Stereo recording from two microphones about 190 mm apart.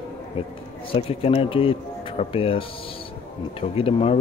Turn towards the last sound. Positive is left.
turn(degrees=30)  # may be behind; listen again after turning